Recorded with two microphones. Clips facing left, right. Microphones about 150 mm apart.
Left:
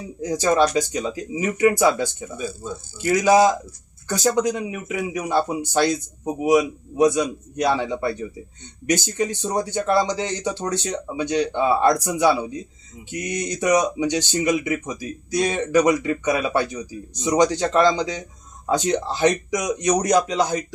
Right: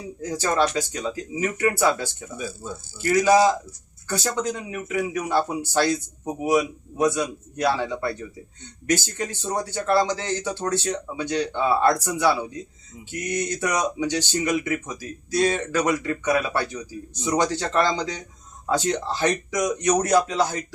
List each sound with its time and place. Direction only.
0.2 s speech: 15° left (ahead or behind)